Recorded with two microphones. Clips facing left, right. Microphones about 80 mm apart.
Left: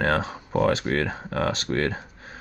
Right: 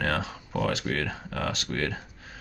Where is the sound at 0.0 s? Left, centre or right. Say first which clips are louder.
Left 5 dB; left.